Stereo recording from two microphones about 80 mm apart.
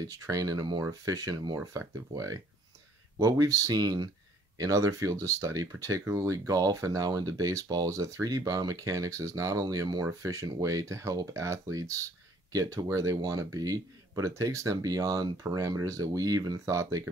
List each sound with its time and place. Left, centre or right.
0.0 s speech: right
1.6 s speech: right
4.6 s speech: right